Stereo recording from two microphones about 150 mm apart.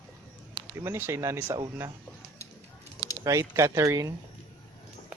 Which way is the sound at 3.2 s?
20° right (ahead or behind).